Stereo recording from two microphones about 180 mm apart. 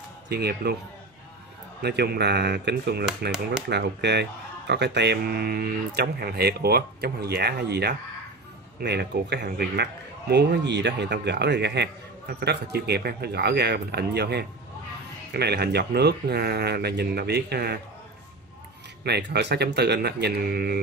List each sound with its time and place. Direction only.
0.3 s speech: 60° right (ahead or behind)
1.8 s a man's voice: 65° right (ahead or behind)
19.0 s speech: 65° right (ahead or behind)